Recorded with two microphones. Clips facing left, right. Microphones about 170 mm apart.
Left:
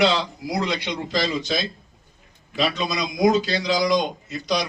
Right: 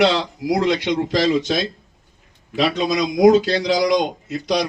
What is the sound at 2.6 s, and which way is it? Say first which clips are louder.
A man's voice: right 5 dB; 70° right (ahead or behind).